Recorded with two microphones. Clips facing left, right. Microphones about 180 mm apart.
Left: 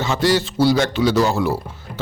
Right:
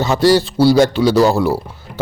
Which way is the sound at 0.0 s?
35° right (ahead or behind).